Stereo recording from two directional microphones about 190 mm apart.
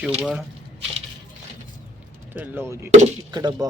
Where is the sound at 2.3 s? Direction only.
10° right (ahead or behind).